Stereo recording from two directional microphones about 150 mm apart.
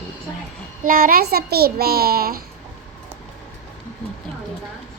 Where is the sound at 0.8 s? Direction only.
75° right (ahead or behind).